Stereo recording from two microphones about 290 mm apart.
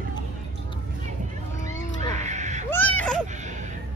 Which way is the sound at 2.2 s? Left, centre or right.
Right.